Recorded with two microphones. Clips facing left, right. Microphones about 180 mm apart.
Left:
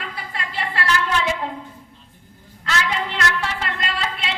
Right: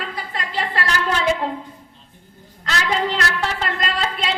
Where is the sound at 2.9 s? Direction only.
35° right (ahead or behind).